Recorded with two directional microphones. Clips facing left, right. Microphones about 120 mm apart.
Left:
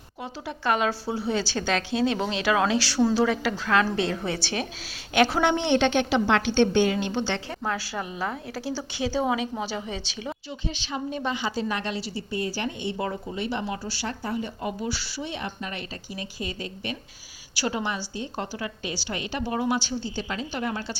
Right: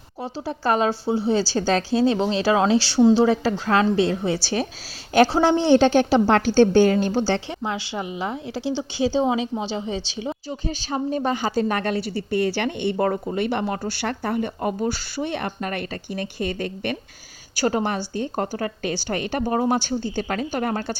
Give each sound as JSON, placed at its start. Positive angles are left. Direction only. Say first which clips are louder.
{"t": 0.2, "sound": "a woman's voice", "louder": "right 5 dB", "side_deg": -35}
{"t": 7.6, "sound": "a woman's voice", "louder": "right 2 dB", "side_deg": -20}
{"t": 10.7, "sound": "a woman's voice", "louder": "right 6 dB", "side_deg": -40}
{"t": 17.6, "sound": "a woman's voice", "louder": "right 6 dB", "side_deg": -45}